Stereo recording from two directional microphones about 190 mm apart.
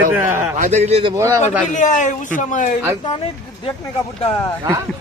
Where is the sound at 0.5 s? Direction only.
40° right (ahead or behind).